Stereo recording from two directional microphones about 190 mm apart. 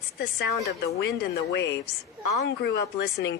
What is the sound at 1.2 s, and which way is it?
Speech, 60° left (ahead or behind).